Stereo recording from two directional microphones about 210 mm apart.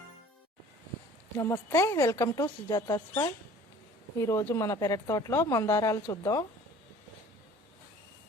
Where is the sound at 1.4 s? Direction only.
15° left (ahead or behind).